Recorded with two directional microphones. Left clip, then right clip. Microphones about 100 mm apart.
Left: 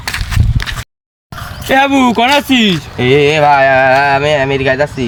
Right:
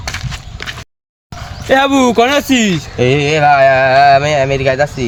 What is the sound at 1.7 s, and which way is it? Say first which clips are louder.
Speech: even; 50° right (ahead or behind).